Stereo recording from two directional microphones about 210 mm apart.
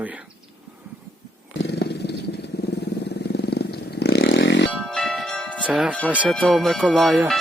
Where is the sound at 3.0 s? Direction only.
55° left (ahead or behind).